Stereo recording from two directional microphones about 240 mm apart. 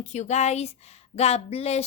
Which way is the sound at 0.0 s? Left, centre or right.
Left.